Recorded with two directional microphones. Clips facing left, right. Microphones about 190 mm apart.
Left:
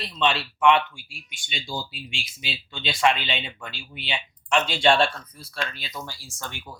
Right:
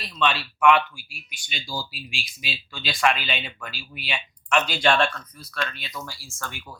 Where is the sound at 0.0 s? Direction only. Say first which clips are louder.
Left 1 dB; 25° left (ahead or behind).